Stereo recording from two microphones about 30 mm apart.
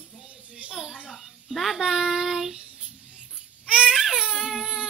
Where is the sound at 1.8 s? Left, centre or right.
Centre.